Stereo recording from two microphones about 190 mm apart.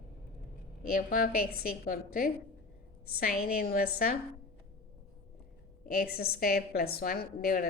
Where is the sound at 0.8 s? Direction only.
50° left (ahead or behind).